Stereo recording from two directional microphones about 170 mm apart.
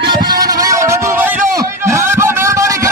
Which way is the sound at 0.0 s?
25° right (ahead or behind).